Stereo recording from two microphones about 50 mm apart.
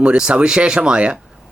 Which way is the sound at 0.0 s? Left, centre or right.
Right.